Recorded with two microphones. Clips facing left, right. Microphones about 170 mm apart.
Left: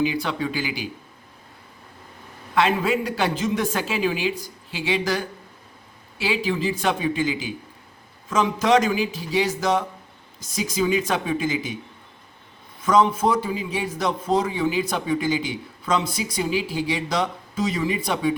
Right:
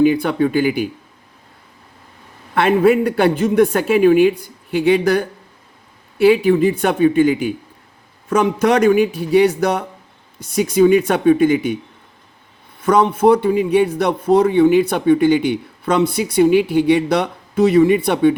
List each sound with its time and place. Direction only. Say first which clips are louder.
0.0 s a man's voice: right 10 dB; 55° right (ahead or behind)
2.6 s a man's voice: right 8 dB; 55° right (ahead or behind)
12.8 s a man's voice: right 6 dB; 60° right (ahead or behind)